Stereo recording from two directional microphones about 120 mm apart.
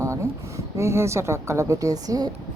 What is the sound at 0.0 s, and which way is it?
A woman's voice, 25° right (ahead or behind).